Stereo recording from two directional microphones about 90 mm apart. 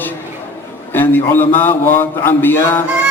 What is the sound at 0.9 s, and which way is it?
Speech, 20° left (ahead or behind).